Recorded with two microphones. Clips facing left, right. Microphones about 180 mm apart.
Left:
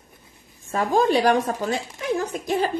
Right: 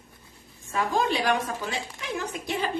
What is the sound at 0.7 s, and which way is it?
A woman's voice, 40° left (ahead or behind).